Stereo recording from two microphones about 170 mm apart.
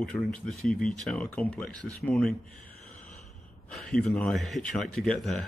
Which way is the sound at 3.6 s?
5° left (ahead or behind).